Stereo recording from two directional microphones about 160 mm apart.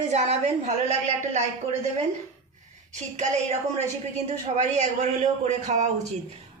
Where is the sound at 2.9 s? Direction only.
50° right (ahead or behind).